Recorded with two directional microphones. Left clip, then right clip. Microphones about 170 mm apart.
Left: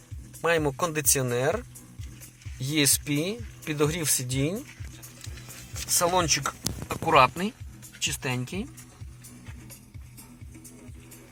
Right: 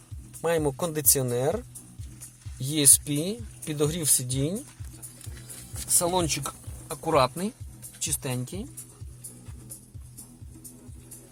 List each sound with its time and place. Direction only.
0.4 s speech: 15° right (ahead or behind)
2.7 s speech: 15° right (ahead or behind)
6.1 s speech: 10° right (ahead or behind); by 8.6 s 5° left (ahead or behind)